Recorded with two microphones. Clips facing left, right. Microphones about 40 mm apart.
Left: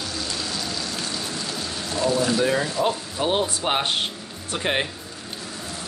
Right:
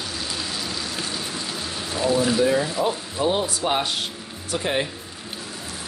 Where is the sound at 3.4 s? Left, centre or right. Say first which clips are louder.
Even; left.